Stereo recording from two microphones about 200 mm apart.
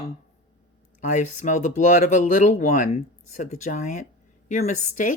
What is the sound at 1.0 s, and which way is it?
A woman's voice, 35° left (ahead or behind).